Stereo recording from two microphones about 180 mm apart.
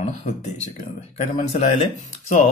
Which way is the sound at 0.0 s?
40° left (ahead or behind).